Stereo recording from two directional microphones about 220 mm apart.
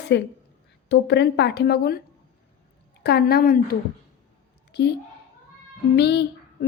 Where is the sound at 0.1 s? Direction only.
55° left (ahead or behind).